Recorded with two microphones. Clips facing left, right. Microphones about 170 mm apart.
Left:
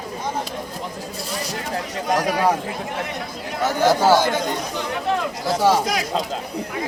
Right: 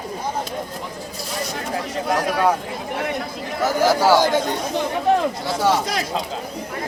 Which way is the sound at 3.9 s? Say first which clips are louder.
Left 1 dB; 5° right (ahead or behind).